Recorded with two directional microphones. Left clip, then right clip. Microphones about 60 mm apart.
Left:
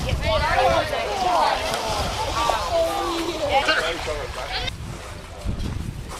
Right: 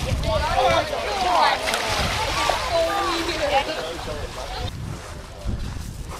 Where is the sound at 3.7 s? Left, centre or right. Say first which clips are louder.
Left 6 dB; left.